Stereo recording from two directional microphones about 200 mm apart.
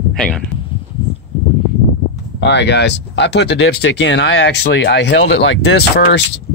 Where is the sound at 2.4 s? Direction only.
60° left (ahead or behind).